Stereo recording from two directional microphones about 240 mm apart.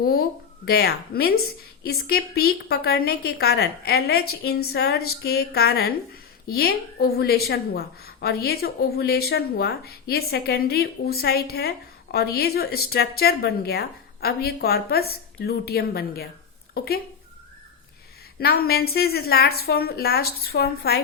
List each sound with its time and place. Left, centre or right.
0.0 s a woman's voice: left
18.3 s a woman's voice: left